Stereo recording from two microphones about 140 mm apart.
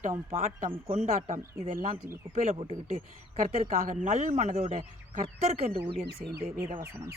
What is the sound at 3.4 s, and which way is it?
Speech, 60° right (ahead or behind).